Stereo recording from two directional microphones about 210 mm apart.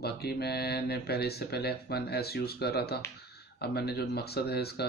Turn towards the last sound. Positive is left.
turn(degrees=50)  # may be behind; listen again after turning